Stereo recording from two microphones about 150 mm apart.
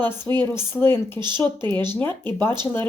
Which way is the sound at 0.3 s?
15° left (ahead or behind).